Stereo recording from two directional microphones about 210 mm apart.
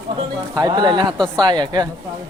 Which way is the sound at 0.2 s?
20° right (ahead or behind).